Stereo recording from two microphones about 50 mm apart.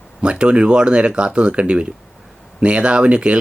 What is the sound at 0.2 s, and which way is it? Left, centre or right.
Speech, right.